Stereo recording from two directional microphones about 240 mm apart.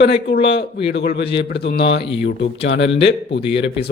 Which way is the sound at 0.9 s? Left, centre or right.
Left.